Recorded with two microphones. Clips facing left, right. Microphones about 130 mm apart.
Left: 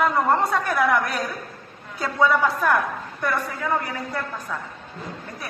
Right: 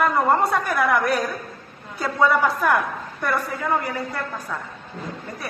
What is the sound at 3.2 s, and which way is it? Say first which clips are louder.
Speech: right 1 dB; centre (ahead or behind).